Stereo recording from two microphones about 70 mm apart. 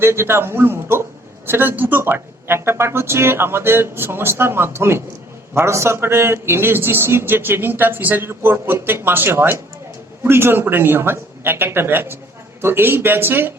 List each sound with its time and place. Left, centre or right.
0.0 s a man's voice: right